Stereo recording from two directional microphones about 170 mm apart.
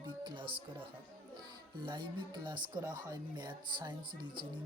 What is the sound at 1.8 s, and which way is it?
Speech, 30° right (ahead or behind).